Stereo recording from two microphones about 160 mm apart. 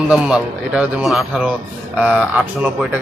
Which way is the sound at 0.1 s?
5° right (ahead or behind).